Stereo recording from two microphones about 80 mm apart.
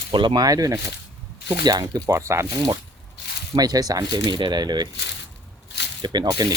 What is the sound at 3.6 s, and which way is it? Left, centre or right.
Speech, right.